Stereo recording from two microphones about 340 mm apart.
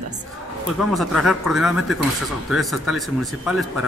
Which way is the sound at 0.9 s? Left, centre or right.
Centre.